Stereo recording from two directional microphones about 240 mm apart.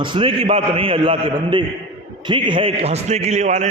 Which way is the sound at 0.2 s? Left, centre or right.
Right.